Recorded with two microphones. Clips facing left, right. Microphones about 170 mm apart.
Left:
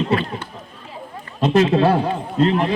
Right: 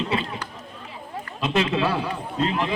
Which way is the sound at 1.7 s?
50° left (ahead or behind).